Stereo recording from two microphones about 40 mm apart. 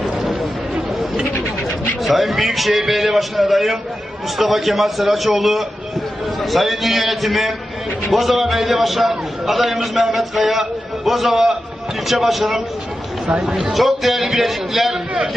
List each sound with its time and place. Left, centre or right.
2.0 s a man's voice: centre